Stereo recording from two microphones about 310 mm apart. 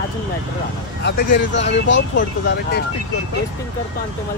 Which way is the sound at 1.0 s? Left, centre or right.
Left.